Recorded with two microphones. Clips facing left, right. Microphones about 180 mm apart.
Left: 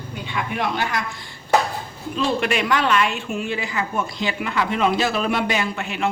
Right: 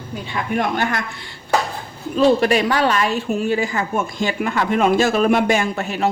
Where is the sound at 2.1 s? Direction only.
40° right (ahead or behind).